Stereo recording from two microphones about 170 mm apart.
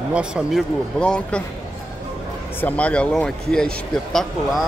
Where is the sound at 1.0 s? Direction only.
5° left (ahead or behind).